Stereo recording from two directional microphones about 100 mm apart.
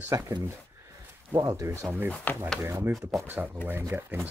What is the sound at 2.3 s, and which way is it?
Speech, 20° left (ahead or behind).